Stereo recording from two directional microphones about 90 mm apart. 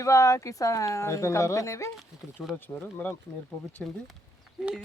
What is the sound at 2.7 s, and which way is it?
Speech, 20° left (ahead or behind).